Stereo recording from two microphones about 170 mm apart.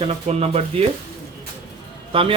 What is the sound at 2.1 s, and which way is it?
Speech, 35° right (ahead or behind).